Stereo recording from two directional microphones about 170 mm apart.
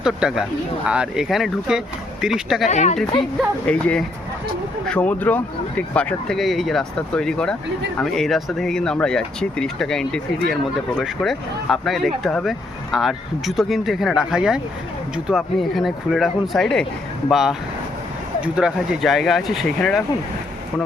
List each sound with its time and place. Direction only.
0.0 s speech: 5° right (ahead or behind)
2.6 s speech: 45° left (ahead or behind)
3.7 s speech: 5° left (ahead or behind)